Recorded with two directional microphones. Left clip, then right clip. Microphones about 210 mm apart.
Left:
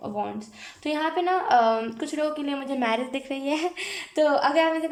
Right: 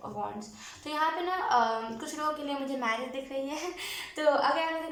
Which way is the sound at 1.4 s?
45° left (ahead or behind).